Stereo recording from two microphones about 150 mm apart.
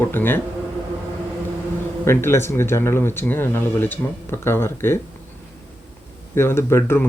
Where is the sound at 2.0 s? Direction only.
15° left (ahead or behind).